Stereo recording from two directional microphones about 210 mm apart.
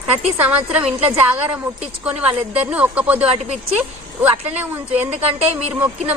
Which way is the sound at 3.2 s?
30° right (ahead or behind).